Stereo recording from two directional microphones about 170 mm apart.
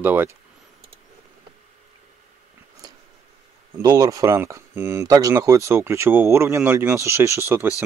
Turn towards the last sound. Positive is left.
turn(degrees=-15)  # may be behind; listen again after turning